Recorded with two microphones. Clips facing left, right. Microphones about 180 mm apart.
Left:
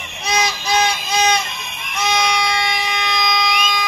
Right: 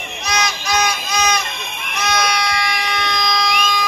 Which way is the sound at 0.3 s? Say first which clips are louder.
Left 2 dB; 30° left (ahead or behind).